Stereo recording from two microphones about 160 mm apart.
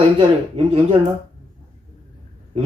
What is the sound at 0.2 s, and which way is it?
Speech, 35° right (ahead or behind).